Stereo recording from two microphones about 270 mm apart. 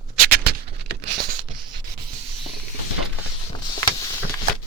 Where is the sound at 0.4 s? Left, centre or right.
Right.